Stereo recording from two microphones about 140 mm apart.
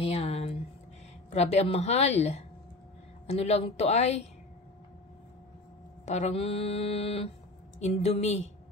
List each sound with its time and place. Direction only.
0.0 s a sound: 45° left (ahead or behind)
1.3 s speech: 50° left (ahead or behind)
6.0 s speech: 55° left (ahead or behind)